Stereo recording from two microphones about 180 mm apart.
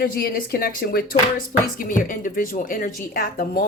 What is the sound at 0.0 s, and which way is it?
Speech, 60° left (ahead or behind).